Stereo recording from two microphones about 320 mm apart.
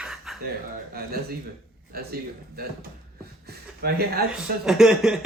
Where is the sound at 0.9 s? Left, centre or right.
Right.